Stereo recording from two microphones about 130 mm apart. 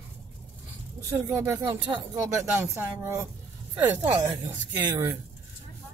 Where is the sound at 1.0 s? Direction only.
20° right (ahead or behind).